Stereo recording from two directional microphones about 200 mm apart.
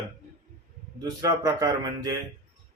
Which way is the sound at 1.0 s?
20° right (ahead or behind).